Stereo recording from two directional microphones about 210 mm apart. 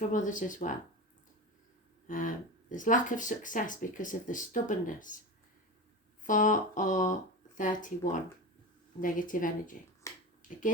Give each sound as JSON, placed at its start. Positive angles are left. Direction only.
{"t": 0.1, "sound": "speech", "side_deg": 35}
{"t": 2.0, "sound": "speech", "side_deg": 40}
{"t": 6.2, "sound": "speech", "side_deg": 40}
{"t": 10.0, "sound": "finger snapping", "side_deg": 15}